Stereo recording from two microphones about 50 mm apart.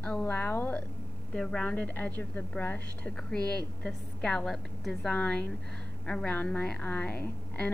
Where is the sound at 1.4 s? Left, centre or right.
Centre.